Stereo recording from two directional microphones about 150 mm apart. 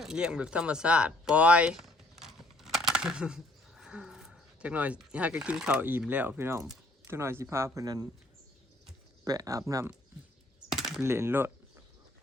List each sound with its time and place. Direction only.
0.0 s speech: 5° right (ahead or behind); by 8.1 s 25° right (ahead or behind)
9.2 s speech: 25° right (ahead or behind)
10.7 s typing: centre (ahead or behind)
11.0 s speech: 15° right (ahead or behind)